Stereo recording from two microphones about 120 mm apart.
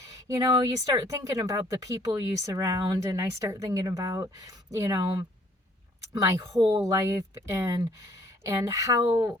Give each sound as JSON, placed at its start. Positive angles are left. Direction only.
{"t": 0.3, "sound": "speech", "side_deg": -30}